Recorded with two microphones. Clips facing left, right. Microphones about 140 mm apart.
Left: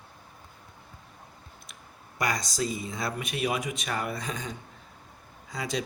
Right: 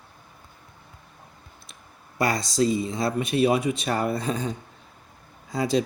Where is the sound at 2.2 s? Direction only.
30° right (ahead or behind).